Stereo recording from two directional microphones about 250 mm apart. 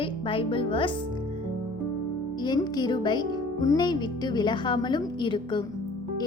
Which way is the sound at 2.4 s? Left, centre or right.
Centre.